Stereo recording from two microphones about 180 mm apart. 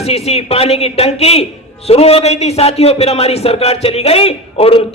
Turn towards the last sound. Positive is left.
turn(degrees=30)  # may be behind; listen again after turning